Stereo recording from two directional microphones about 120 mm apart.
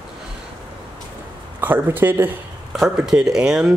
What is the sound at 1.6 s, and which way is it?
Speech, 15° right (ahead or behind).